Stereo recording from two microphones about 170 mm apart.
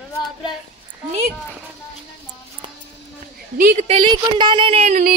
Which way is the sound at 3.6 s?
55° right (ahead or behind).